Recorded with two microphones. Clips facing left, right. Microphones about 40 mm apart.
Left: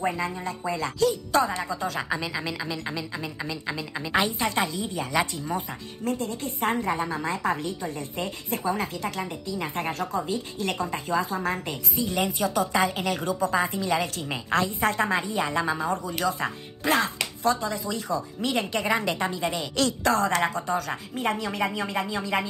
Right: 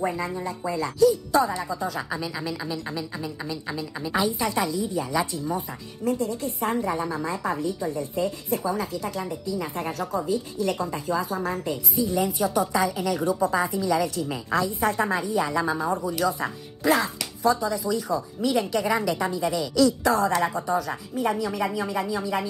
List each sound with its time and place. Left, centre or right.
0.9 s speech: left
2.4 s speech: left
4.2 s a woman's voice: left
19.8 s a woman's voice: left